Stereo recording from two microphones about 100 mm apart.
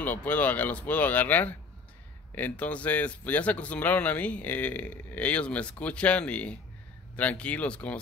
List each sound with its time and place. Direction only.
0.0 s speech: 15° left (ahead or behind)